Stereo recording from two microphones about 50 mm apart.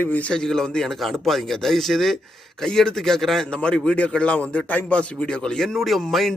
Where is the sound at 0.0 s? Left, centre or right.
Left.